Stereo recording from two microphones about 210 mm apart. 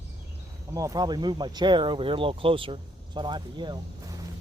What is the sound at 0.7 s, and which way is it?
Speech, 15° right (ahead or behind).